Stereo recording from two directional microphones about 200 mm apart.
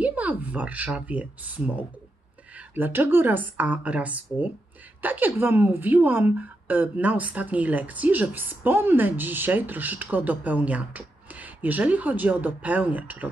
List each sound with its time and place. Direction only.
0.0 s a woman's voice: 5° right (ahead or behind)